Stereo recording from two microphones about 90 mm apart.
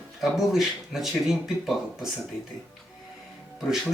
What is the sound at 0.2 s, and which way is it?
Speech, 5° right (ahead or behind).